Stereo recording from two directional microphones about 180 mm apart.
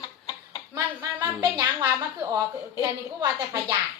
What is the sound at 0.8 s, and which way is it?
A woman's voice, 20° right (ahead or behind).